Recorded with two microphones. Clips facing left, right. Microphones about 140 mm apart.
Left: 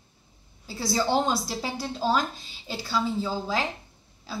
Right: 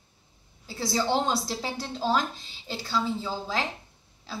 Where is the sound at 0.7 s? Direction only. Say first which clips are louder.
Left 1 dB; 5° left (ahead or behind).